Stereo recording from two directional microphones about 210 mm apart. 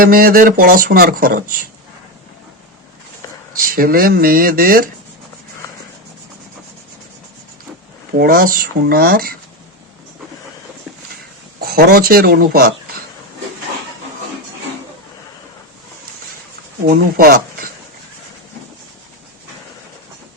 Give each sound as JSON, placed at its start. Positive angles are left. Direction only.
{"t": 0.0, "sound": "speech", "side_deg": -45}
{"t": 3.8, "sound": "speech", "side_deg": -45}
{"t": 8.2, "sound": "speech", "side_deg": -45}
{"t": 11.6, "sound": "speech", "side_deg": -45}
{"t": 16.8, "sound": "speech", "side_deg": -45}